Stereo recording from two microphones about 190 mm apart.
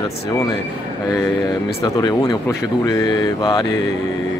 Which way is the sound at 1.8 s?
20° left (ahead or behind).